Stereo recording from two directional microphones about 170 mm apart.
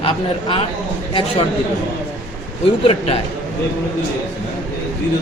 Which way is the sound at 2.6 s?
35° left (ahead or behind).